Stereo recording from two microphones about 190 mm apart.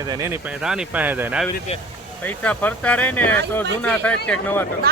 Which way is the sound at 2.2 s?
10° left (ahead or behind).